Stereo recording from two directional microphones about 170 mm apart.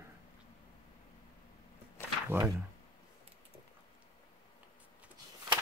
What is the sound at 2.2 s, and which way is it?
Speech, 10° right (ahead or behind).